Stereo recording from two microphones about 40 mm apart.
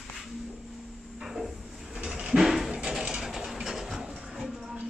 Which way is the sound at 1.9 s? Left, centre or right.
Right.